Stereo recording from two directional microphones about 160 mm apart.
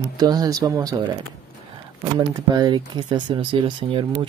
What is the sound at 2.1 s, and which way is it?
Speech, 25° right (ahead or behind).